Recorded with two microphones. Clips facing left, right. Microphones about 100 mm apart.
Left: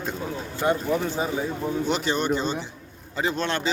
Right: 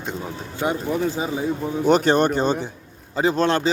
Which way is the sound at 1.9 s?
50° right (ahead or behind).